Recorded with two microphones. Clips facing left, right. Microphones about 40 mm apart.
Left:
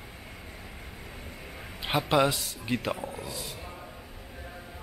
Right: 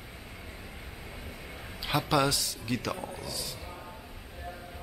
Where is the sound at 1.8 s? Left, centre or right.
Left.